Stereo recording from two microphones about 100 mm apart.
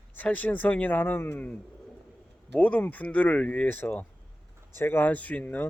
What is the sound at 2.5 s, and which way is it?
Speech, 15° left (ahead or behind).